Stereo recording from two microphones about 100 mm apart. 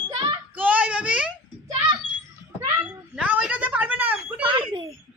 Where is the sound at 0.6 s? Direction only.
15° right (ahead or behind).